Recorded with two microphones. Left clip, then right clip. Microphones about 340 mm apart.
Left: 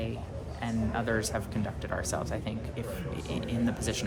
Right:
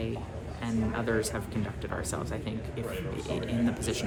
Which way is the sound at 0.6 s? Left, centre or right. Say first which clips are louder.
Even; centre.